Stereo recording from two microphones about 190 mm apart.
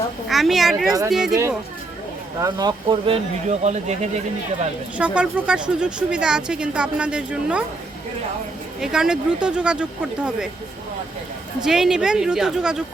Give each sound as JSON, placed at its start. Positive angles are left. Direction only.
{"t": 0.3, "sound": "speech", "side_deg": 0}
{"t": 1.3, "sound": "speech", "side_deg": -15}
{"t": 3.6, "sound": "speech", "side_deg": -35}
{"t": 4.9, "sound": "speech", "side_deg": -5}
{"t": 8.8, "sound": "speech", "side_deg": -5}
{"t": 11.6, "sound": "speech", "side_deg": 0}